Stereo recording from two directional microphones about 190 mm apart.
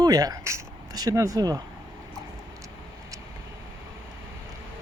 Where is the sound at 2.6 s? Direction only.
15° right (ahead or behind).